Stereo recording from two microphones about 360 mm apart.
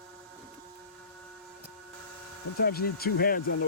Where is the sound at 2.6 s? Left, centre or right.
Left.